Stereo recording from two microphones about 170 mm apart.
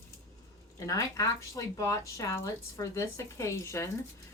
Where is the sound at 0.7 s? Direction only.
20° left (ahead or behind).